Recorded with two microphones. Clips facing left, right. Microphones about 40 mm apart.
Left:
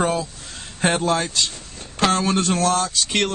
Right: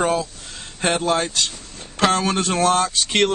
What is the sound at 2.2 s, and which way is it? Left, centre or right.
Speech, right.